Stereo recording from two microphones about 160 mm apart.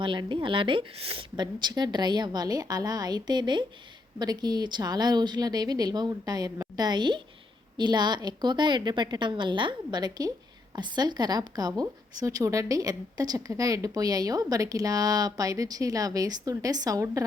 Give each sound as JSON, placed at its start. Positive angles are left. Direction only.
{"t": 0.0, "sound": "a woman's voice", "side_deg": -30}